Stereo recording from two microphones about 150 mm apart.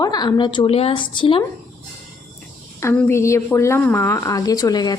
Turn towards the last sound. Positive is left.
turn(degrees=25)  # may be behind; listen again after turning